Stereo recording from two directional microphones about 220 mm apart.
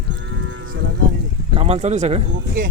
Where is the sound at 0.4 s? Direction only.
60° right (ahead or behind).